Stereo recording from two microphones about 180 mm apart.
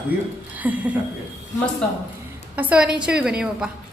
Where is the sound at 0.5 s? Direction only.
10° right (ahead or behind).